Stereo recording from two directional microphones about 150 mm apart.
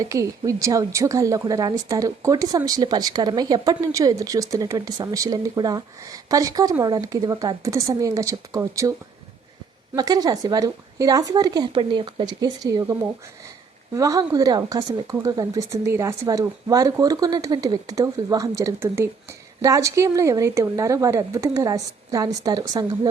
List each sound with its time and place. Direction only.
0.0 s speech: 20° right (ahead or behind)
9.9 s speech: 25° right (ahead or behind)